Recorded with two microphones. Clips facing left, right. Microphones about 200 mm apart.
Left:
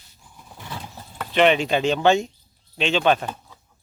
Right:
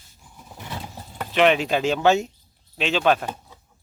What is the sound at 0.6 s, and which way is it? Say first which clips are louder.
Horse: right 1 dB; 20° right (ahead or behind).